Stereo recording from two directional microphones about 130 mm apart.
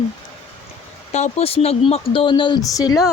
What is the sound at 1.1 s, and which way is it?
Speech, 60° left (ahead or behind).